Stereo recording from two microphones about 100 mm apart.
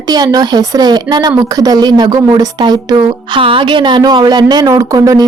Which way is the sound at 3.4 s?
60° right (ahead or behind).